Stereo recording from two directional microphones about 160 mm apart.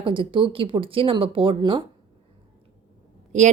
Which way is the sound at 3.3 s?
45° right (ahead or behind).